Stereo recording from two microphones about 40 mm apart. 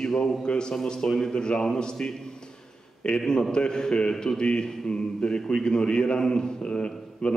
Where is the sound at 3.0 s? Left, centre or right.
Left.